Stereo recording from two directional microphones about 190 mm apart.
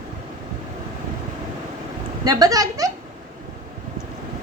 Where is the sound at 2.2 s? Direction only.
20° right (ahead or behind).